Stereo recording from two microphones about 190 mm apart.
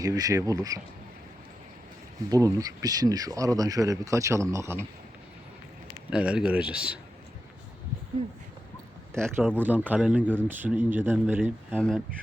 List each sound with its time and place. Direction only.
0.0 s speech: 20° right (ahead or behind)
2.3 s speech: 20° right (ahead or behind)
6.1 s speech: 5° right (ahead or behind)
9.1 s speech: 15° right (ahead or behind)
11.8 s speech: 5° left (ahead or behind)